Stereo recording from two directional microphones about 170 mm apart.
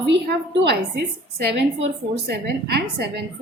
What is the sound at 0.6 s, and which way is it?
A woman's voice, 75° right (ahead or behind).